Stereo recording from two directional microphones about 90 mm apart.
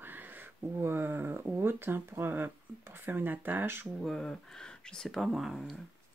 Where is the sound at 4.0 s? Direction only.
5° left (ahead or behind).